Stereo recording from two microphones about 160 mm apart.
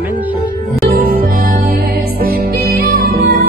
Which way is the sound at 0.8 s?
70° right (ahead or behind).